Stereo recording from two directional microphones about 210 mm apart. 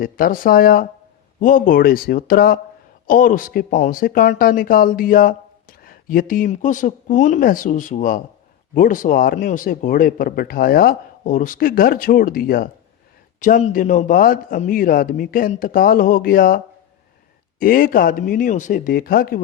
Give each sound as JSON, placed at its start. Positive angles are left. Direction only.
{"t": 0.0, "sound": "speech", "side_deg": 40}
{"t": 17.6, "sound": "speech", "side_deg": 40}